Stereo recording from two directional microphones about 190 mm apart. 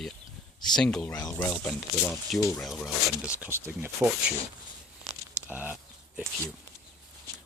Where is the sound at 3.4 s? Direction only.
10° right (ahead or behind).